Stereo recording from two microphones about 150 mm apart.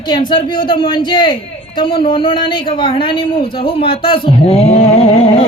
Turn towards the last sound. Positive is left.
turn(degrees=40)  # may be behind; listen again after turning